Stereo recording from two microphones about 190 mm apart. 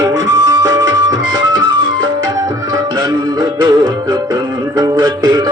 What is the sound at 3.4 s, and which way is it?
Music, 20° right (ahead or behind).